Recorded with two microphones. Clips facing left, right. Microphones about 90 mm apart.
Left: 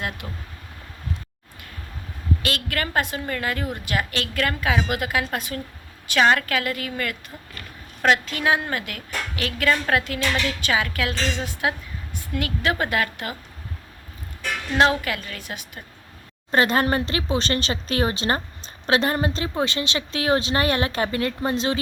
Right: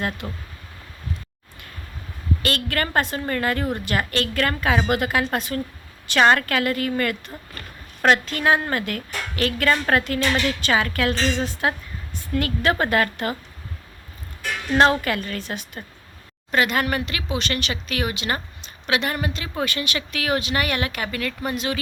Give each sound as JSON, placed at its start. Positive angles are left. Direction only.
{"t": 0.2, "sound": "a woman's voice", "side_deg": -5}
{"t": 2.4, "sound": "a woman's voice", "side_deg": 5}
{"t": 14.8, "sound": "a woman's voice", "side_deg": 5}
{"t": 16.5, "sound": "speech", "side_deg": 30}